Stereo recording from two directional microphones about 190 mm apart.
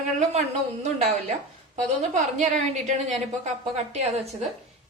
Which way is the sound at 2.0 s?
40° right (ahead or behind).